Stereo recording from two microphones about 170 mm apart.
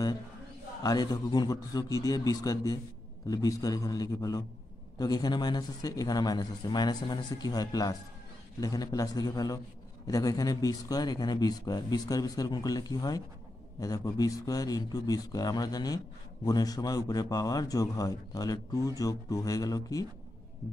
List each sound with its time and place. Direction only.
0.8 s a man's voice: 25° left (ahead or behind)